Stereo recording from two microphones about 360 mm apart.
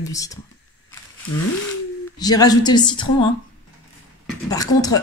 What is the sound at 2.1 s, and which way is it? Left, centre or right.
A woman's voice, centre.